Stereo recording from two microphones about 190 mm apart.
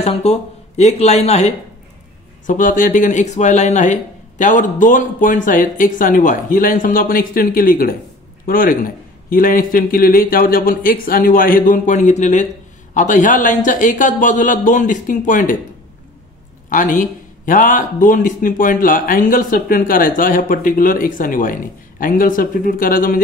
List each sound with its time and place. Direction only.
0.0 s speech: 30° left (ahead or behind)
16.6 s speech: 45° left (ahead or behind)